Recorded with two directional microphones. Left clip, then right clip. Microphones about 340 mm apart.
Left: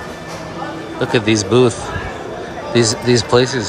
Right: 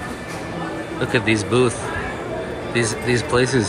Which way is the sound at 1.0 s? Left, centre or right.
Centre.